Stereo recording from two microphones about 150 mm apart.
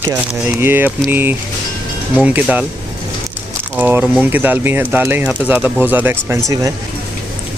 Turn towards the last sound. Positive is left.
turn(degrees=-20)  # may be behind; listen again after turning